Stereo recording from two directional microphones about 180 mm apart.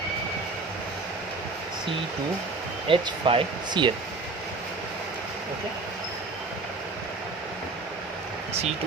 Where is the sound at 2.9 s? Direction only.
30° right (ahead or behind).